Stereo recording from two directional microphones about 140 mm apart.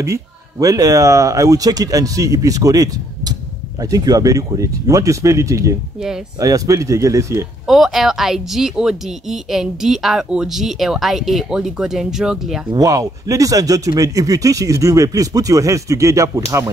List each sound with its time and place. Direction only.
0.0 s speech: 20° right (ahead or behind)
7.6 s speech: centre (ahead or behind)
12.7 s speech: 25° right (ahead or behind)